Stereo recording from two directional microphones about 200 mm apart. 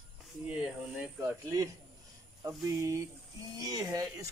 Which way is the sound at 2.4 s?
15° right (ahead or behind).